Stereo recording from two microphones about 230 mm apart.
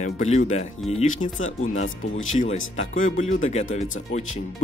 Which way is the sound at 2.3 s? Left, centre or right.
Left.